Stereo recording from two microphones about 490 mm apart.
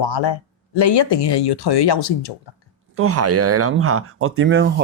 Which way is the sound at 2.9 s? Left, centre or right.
Right.